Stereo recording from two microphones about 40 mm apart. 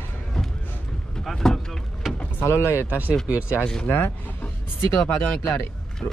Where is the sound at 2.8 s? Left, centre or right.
Right.